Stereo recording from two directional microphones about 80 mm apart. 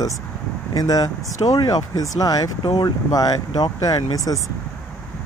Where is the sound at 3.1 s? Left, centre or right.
Left.